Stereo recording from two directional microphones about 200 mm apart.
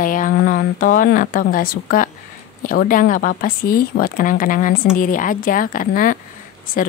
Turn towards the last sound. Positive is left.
turn(degrees=45)  # may be behind; listen again after turning